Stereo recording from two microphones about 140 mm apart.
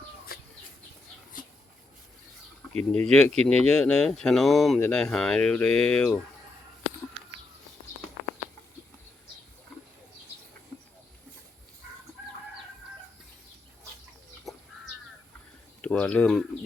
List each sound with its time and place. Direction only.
0.3 s chicken: 90° left
2.9 s speech: 5° left (ahead or behind)
14.5 s crow: centre (ahead or behind)
15.8 s speech: 10° left (ahead or behind)